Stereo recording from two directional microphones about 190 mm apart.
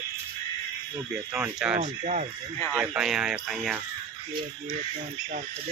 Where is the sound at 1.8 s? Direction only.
40° right (ahead or behind).